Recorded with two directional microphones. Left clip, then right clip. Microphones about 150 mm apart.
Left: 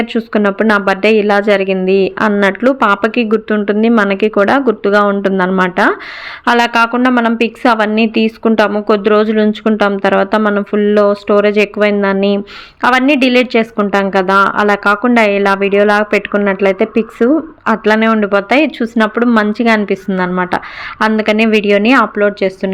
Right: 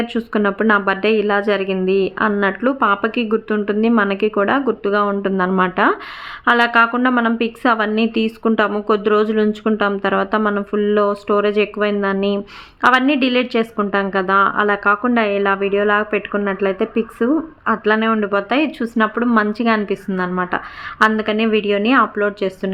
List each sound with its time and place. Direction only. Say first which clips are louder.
0.0 s a woman's voice: left 5 dB; 20° left (ahead or behind)